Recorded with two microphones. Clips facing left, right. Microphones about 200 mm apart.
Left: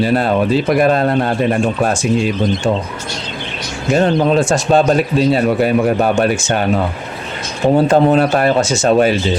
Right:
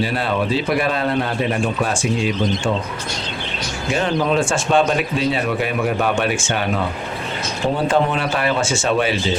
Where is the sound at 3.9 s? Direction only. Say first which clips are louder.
Left 6 dB; 40° left (ahead or behind).